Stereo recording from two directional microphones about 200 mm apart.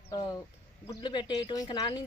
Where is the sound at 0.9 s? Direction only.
20° left (ahead or behind).